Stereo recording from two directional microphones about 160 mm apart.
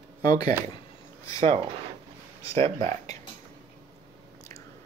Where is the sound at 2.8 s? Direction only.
45° right (ahead or behind).